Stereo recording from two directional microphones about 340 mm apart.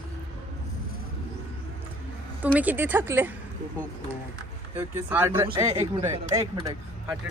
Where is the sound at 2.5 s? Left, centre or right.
Centre.